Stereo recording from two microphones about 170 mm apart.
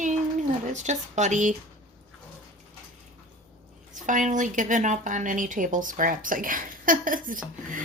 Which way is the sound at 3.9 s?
50° right (ahead or behind).